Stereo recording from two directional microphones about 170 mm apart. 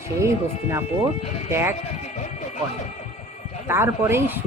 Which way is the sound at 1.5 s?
15° right (ahead or behind).